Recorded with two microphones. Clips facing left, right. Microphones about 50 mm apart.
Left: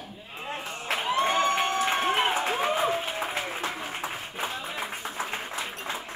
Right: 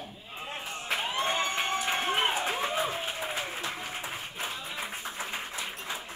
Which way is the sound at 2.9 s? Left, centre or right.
Left.